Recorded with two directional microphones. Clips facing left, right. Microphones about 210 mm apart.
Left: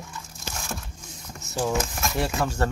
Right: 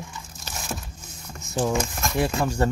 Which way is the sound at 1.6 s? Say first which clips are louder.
Right 2 dB; 5° left (ahead or behind).